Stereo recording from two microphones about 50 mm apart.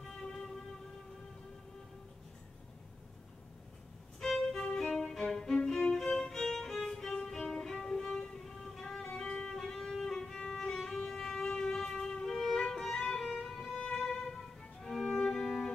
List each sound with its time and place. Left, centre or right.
0.0 s music: centre
4.2 s violin: centre
9.2 s music: left
9.6 s music: centre
10.8 s violin: centre
12.8 s music: centre